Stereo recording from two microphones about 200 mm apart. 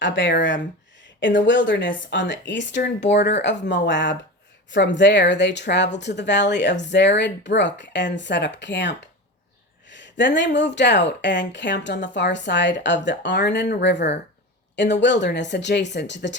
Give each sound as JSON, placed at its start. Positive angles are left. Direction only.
{"t": 0.0, "sound": "speech", "side_deg": 65}